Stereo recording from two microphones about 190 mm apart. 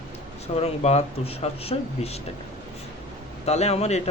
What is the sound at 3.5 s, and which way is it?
Speech, 35° left (ahead or behind).